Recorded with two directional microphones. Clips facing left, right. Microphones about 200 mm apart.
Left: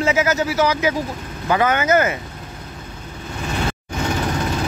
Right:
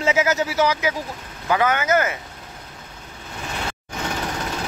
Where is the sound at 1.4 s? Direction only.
5° right (ahead or behind).